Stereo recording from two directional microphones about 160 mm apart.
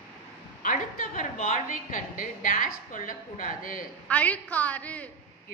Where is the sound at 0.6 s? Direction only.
55° left (ahead or behind).